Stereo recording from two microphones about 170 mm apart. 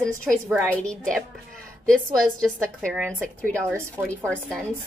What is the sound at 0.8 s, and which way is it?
Speech, 5° left (ahead or behind).